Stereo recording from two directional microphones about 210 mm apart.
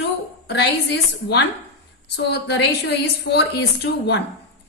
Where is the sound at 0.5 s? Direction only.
55° left (ahead or behind).